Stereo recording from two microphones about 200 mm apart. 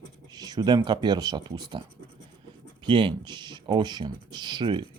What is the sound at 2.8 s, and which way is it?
Speech, 25° right (ahead or behind).